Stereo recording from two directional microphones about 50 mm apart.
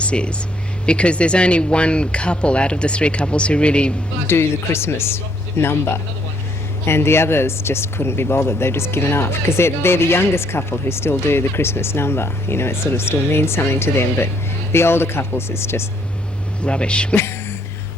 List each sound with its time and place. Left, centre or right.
0.0 s speech: left
4.3 s speech: left
16.6 s speech: left